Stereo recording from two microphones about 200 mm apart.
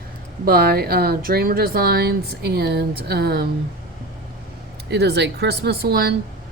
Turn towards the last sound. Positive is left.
turn(degrees=-50)  # may be behind; listen again after turning